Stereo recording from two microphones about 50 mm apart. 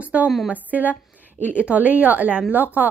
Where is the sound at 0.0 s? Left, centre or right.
Right.